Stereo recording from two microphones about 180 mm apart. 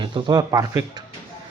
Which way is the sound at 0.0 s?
25° right (ahead or behind).